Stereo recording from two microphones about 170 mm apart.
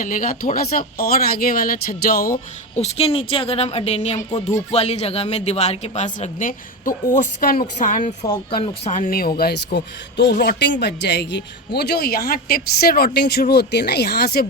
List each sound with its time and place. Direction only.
0.0 s speech: 50° left (ahead or behind)
2.7 s a woman's voice: 35° left (ahead or behind)
8.3 s a woman's voice: 30° left (ahead or behind); by 9.3 s 60° left (ahead or behind)
9.7 s speech: 90° left; by 14.4 s 70° left (ahead or behind)